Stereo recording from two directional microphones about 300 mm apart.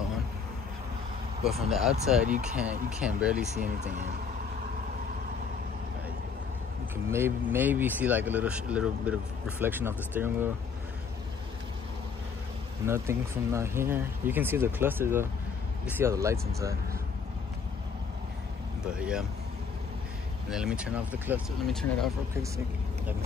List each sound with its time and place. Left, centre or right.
1.4 s speech: centre
3.5 s speech: right
7.1 s speech: centre
12.8 s speech: centre
18.9 s speech: centre
20.4 s speech: centre